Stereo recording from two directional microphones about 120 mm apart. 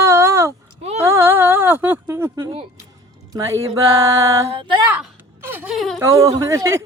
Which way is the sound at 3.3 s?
30° right (ahead or behind).